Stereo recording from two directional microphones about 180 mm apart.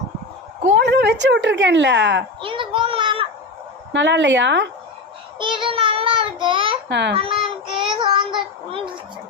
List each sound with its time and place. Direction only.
0.7 s a woman's voice: 70° right (ahead or behind)
2.4 s a child's voice: 30° right (ahead or behind)
3.9 s a woman's voice: 80° right
5.4 s child singing: 25° right (ahead or behind)
6.8 s a child's voice: 70° right (ahead or behind)
7.1 s child singing: 30° right (ahead or behind)